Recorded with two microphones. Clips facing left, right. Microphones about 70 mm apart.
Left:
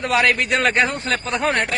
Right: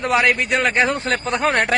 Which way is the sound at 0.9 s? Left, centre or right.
Right.